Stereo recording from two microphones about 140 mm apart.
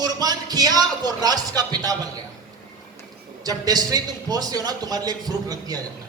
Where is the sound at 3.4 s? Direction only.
25° right (ahead or behind).